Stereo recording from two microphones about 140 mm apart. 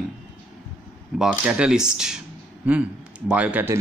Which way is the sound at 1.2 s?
5° right (ahead or behind).